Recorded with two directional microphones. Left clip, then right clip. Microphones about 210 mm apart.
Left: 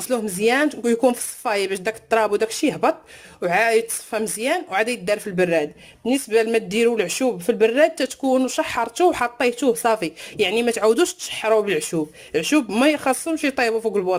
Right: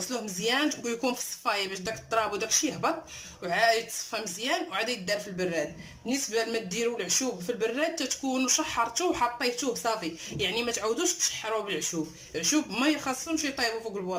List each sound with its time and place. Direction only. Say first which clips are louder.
0.1 s speech: left 11 dB; 50° left (ahead or behind)